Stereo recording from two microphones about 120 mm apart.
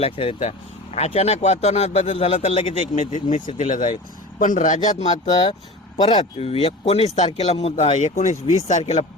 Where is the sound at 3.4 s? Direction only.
90° left; by 6.0 s 60° left (ahead or behind).